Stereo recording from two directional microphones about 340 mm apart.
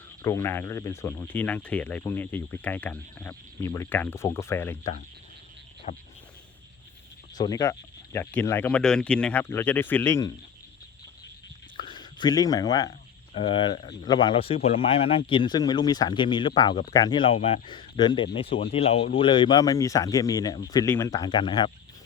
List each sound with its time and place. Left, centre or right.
0.2 s speech: centre
5.9 s frog: left
7.3 s speech: centre
11.8 s a sound: centre
13.3 s speech: centre